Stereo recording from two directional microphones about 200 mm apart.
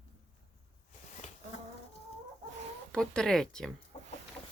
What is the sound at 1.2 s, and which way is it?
Bee, 35° left (ahead or behind).